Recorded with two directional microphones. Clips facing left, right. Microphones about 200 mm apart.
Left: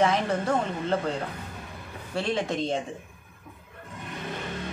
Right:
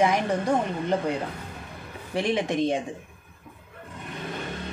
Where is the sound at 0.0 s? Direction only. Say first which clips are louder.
Right 1 dB; 15° right (ahead or behind).